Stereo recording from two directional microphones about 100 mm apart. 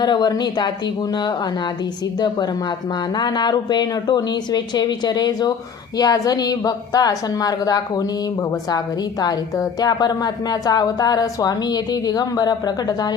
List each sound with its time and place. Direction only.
0.0 s speech: 45° left (ahead or behind)
3.2 s a woman's voice: 45° left (ahead or behind)
9.2 s a woman's voice: 40° left (ahead or behind)